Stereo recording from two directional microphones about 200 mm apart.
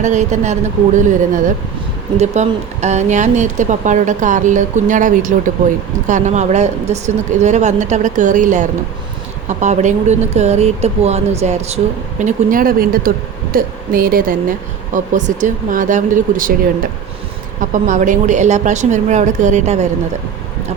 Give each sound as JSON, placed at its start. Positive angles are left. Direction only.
{"t": 0.0, "sound": "speech", "side_deg": -35}
{"t": 17.6, "sound": "speech", "side_deg": -40}